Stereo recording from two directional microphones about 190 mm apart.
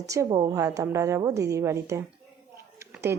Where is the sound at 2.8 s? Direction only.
15° right (ahead or behind).